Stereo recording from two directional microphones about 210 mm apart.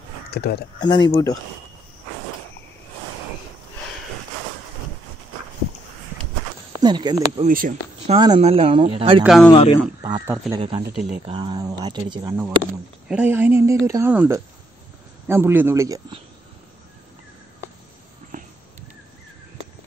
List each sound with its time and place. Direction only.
0.3 s speech: 50° left (ahead or behind)
0.7 s speech: 20° left (ahead or behind)
6.8 s speech: 20° right (ahead or behind)
7.4 s speech: 40° right (ahead or behind)
8.1 s speech: 25° right (ahead or behind)
9.2 s speech: centre (ahead or behind)
9.5 s speech: 30° left (ahead or behind)
10.0 s a man's voice: 15° right (ahead or behind)
10.6 s speech: 20° right (ahead or behind)
13.1 s a man's voice: 10° right (ahead or behind)
18.3 s dog: 40° right (ahead or behind)